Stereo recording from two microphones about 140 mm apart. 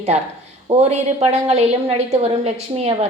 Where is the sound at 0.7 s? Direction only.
50° right (ahead or behind).